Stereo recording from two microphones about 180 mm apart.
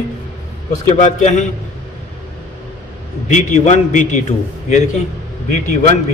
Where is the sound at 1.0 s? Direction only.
40° left (ahead or behind).